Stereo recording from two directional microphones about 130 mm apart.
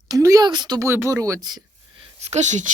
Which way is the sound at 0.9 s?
20° right (ahead or behind).